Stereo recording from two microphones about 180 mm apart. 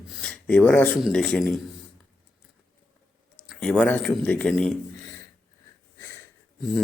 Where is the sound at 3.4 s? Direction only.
5° left (ahead or behind).